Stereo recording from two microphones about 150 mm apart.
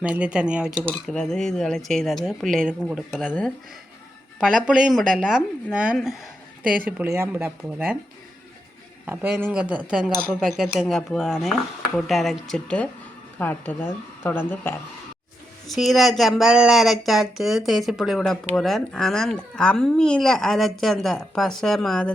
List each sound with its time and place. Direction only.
0.0 s speech: 5° right (ahead or behind)
0.9 s speech: 5° left (ahead or behind)
3.2 s speech: 10° left (ahead or behind)
4.4 s speech: 5° right (ahead or behind)
9.0 s speech: 10° right (ahead or behind); by 14.8 s 15° left (ahead or behind)
15.6 s speech: centre (ahead or behind)